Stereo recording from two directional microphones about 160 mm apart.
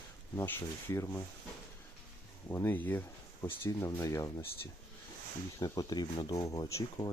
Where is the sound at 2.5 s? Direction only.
15° left (ahead or behind).